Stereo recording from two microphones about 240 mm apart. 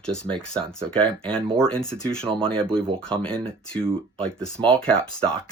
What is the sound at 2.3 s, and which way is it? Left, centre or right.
Speech, right.